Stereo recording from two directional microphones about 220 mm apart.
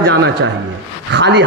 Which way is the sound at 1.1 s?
50° right (ahead or behind).